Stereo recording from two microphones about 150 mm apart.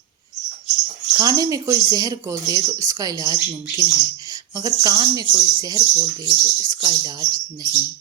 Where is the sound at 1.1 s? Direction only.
25° right (ahead or behind).